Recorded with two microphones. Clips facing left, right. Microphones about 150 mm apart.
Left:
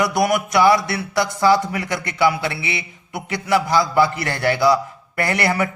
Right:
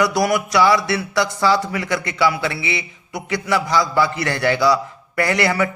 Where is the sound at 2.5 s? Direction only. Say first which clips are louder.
Right 2 dB; 20° right (ahead or behind).